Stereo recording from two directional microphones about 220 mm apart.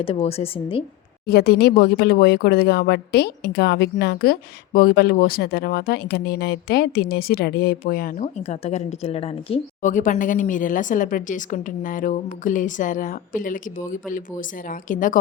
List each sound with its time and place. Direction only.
0.0 s a woman's voice: 25° left (ahead or behind)
1.3 s speech: 45° left (ahead or behind)